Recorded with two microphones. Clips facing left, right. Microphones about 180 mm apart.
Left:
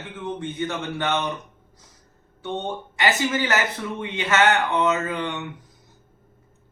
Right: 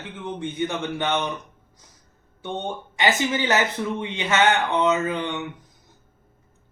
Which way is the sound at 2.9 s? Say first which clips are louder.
Even; 20° right (ahead or behind).